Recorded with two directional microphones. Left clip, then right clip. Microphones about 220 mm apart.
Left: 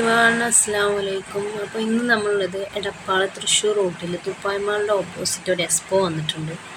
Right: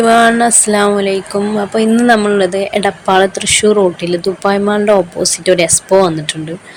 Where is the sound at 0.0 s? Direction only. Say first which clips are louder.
Right 9 dB; 40° right (ahead or behind).